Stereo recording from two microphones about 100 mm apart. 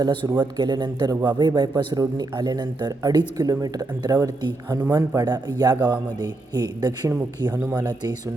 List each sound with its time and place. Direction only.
0.0 s speech: 45° right (ahead or behind)
7.5 s speech: 15° right (ahead or behind)